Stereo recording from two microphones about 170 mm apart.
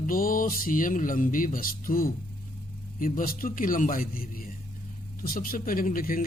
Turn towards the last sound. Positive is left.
turn(degrees=55)  # may be behind; listen again after turning